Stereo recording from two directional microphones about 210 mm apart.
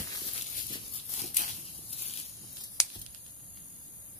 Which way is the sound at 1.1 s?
35° left (ahead or behind).